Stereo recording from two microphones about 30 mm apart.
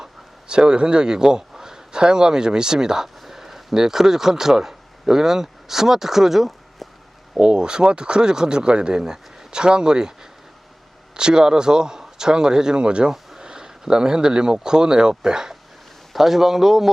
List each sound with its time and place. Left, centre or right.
0.0 s speech: right
3.2 s a sound: centre
3.8 s speech: centre
7.3 s speech: right
13.1 s speech: right
16.1 s speech: centre